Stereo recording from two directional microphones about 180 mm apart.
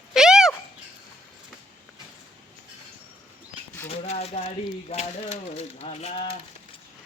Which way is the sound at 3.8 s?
35° left (ahead or behind).